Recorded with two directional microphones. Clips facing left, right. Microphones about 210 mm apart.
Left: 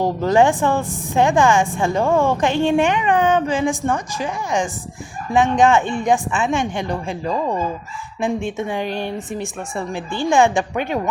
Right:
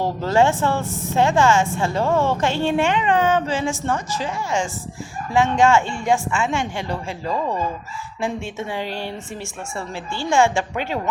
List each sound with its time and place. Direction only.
0.0 s a woman's voice: 15° left (ahead or behind)